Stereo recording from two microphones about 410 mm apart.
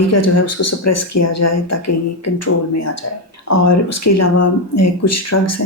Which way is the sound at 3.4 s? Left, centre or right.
Left.